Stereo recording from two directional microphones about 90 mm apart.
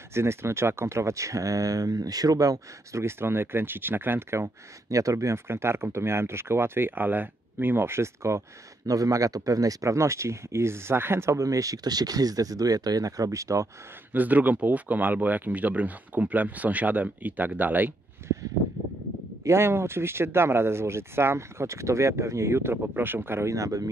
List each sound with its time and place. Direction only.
0.1 s speech: 30° right (ahead or behind)
14.1 s speech: 20° right (ahead or behind)
19.4 s speech: 30° right (ahead or behind)